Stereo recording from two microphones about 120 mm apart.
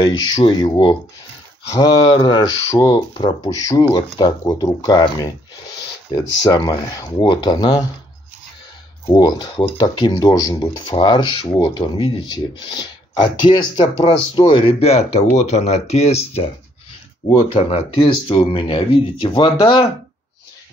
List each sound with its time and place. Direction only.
0.0 s speech: 35° left (ahead or behind)
3.4 s speech: 30° left (ahead or behind)
9.1 s speech: 35° left (ahead or behind); by 16.4 s 60° left (ahead or behind)
17.6 s speech: 55° left (ahead or behind)